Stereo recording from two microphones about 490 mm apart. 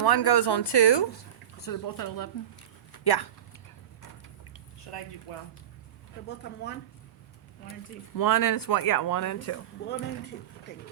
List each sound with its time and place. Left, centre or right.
0.0 s speech: left
1.5 s speech: left
4.9 s speech: left
6.2 s speech: left
7.7 s speech: left